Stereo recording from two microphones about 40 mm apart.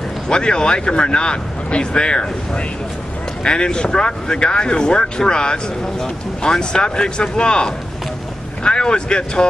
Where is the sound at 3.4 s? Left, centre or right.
Left.